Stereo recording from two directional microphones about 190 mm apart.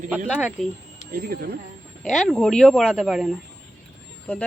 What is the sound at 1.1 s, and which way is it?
Speech, 50° right (ahead or behind).